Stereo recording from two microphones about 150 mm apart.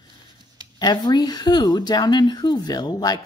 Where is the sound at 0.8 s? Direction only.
25° left (ahead or behind).